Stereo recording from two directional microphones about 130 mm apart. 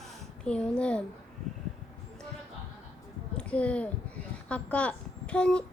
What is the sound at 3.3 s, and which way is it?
A woman's voice, 10° left (ahead or behind).